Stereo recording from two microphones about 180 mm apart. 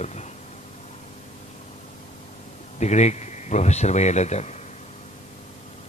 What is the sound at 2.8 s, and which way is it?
Speech, 40° left (ahead or behind).